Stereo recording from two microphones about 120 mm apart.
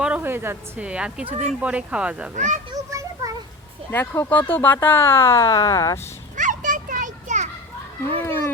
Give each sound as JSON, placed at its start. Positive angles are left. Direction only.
{"t": 0.0, "sound": "speech", "side_deg": -15}
{"t": 2.3, "sound": "a child's voice", "side_deg": -90}
{"t": 2.7, "sound": "a sound", "side_deg": -30}
{"t": 3.9, "sound": "speech", "side_deg": 20}
{"t": 6.3, "sound": "children playing", "side_deg": -90}